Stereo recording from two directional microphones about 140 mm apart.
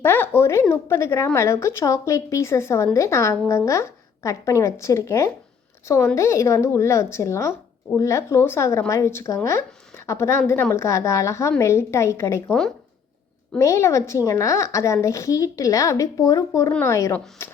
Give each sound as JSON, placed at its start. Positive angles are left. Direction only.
{"t": 0.0, "sound": "a sound", "side_deg": 15}
{"t": 0.7, "sound": "a woman's voice", "side_deg": 20}
{"t": 13.6, "sound": "a woman's voice", "side_deg": 20}